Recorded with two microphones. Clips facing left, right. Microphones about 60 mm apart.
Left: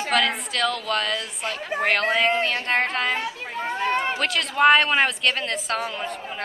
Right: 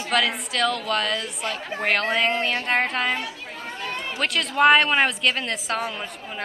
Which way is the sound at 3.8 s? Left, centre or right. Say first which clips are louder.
Left 8 dB; left.